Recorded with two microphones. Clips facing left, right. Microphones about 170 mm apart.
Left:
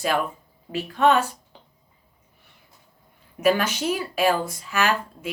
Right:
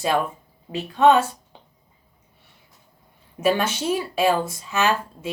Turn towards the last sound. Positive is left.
turn(degrees=-25)  # may be behind; listen again after turning